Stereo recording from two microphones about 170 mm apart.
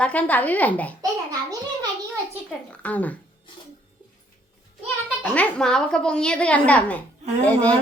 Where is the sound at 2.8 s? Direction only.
10° left (ahead or behind).